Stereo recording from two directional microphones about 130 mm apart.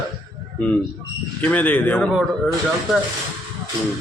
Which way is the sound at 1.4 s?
10° left (ahead or behind).